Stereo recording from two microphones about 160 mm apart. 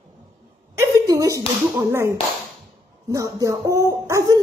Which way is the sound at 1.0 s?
20° right (ahead or behind).